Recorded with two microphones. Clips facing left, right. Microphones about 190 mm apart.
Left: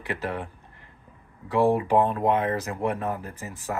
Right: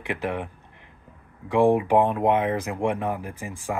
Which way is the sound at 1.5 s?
15° right (ahead or behind).